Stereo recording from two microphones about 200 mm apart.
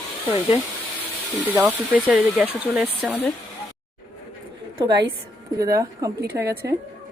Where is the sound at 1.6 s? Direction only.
5° right (ahead or behind).